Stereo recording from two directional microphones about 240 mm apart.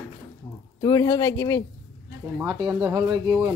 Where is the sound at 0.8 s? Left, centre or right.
Centre.